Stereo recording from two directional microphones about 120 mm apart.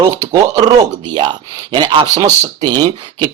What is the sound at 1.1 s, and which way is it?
Speech, 40° right (ahead or behind).